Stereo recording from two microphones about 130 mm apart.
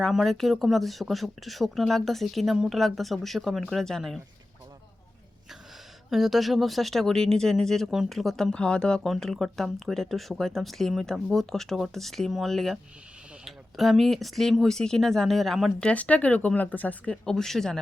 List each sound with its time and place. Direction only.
0.0 s speech: centre (ahead or behind)
6.1 s speech: centre (ahead or behind)